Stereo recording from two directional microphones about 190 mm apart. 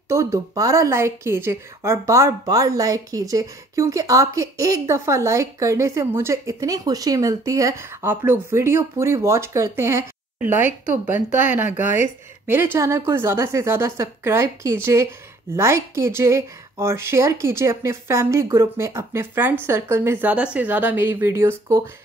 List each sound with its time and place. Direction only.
0.1 s speech: 15° right (ahead or behind)